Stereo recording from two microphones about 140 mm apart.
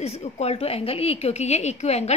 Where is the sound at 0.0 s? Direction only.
50° left (ahead or behind).